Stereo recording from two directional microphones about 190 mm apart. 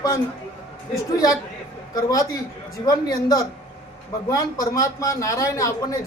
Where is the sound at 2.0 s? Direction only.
20° left (ahead or behind).